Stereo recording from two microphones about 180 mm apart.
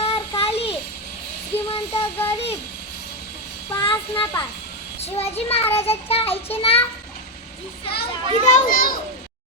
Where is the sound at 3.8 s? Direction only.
30° left (ahead or behind).